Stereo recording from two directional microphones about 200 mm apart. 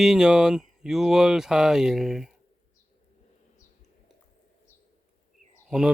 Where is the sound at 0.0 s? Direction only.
Centre (ahead or behind).